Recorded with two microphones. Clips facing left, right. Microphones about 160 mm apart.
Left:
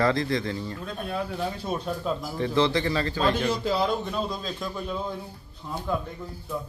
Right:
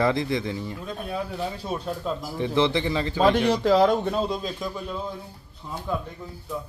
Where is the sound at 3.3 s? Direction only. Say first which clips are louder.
Right 6 dB; 80° right.